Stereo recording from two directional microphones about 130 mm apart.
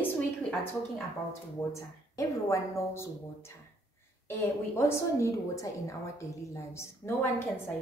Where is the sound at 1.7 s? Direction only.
25° left (ahead or behind).